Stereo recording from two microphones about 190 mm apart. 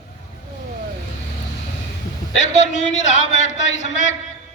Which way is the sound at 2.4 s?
35° left (ahead or behind).